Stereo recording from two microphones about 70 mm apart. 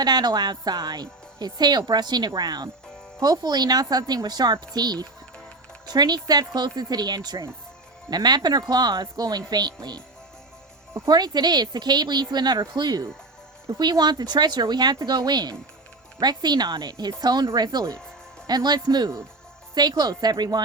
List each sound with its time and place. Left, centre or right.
0.0 s speech: right
3.2 s a woman's voice: right
11.1 s speech: right